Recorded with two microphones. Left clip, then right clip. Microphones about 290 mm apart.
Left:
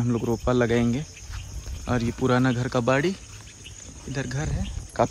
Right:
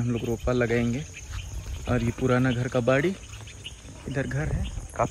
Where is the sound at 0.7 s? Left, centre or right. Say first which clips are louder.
Left 2 dB; left.